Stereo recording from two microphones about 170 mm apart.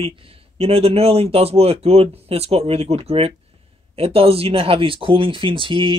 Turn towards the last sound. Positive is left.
turn(degrees=-30)  # may be behind; listen again after turning